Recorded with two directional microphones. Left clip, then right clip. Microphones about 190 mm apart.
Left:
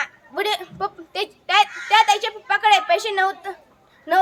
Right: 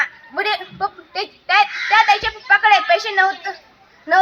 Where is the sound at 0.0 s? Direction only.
40° left (ahead or behind).